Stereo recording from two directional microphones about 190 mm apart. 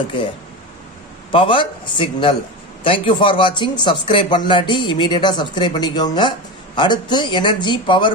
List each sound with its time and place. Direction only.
1.3 s a man's voice: 25° left (ahead or behind)